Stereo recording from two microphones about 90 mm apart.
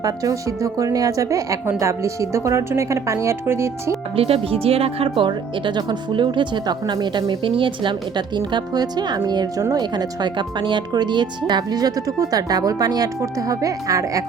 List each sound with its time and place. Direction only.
0.0 s speech: 40° right (ahead or behind)
4.1 s speech: 90° right; by 14.3 s 40° right (ahead or behind)